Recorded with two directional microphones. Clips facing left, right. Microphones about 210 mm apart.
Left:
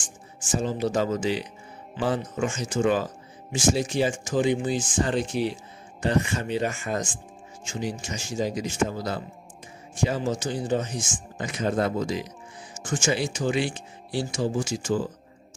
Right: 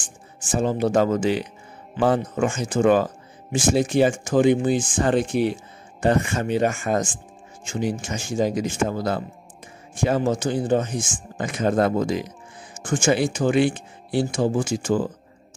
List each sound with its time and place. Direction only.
0.5 s speech: 55° right (ahead or behind)